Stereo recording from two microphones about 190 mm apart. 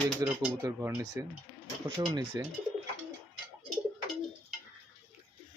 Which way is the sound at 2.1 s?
25° right (ahead or behind).